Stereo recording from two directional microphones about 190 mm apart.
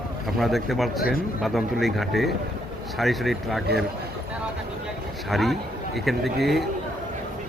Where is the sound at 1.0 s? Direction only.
50° left (ahead or behind).